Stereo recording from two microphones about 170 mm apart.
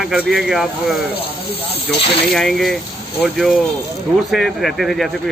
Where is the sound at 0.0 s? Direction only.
Centre (ahead or behind).